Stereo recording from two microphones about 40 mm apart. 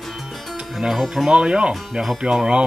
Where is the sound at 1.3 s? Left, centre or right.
Right.